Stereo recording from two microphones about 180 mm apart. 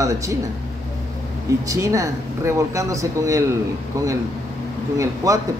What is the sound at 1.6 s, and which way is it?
Speech, 20° right (ahead or behind).